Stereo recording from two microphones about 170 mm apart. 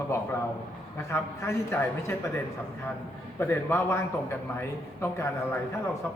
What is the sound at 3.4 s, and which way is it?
A man's voice, 15° left (ahead or behind).